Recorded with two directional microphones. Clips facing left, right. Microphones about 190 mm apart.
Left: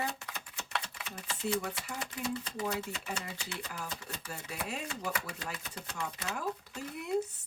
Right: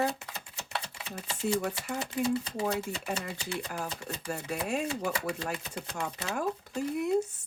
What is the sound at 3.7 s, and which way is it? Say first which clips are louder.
Speech: right 6 dB; 50° right (ahead or behind).